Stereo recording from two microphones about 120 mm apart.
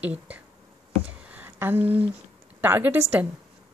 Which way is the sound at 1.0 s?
10° right (ahead or behind).